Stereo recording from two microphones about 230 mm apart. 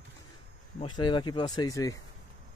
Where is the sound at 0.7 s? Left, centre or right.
Centre.